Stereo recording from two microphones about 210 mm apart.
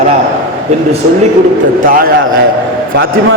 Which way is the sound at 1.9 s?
45° right (ahead or behind).